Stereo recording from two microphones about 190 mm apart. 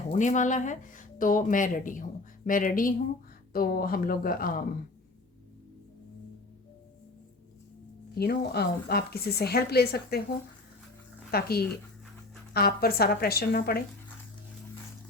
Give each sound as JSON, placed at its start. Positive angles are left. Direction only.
{"t": 0.1, "sound": "speech", "side_deg": 40}
{"t": 8.1, "sound": "speech", "side_deg": 55}
{"t": 11.3, "sound": "speech", "side_deg": 55}